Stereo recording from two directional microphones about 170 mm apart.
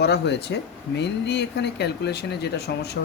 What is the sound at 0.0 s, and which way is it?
Speech, 80° left.